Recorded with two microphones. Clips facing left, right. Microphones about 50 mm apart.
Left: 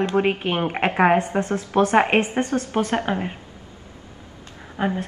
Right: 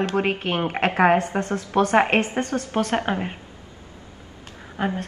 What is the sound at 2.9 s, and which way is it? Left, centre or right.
Speech, right.